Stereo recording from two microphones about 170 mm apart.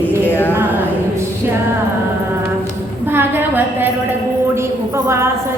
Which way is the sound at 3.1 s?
10° right (ahead or behind).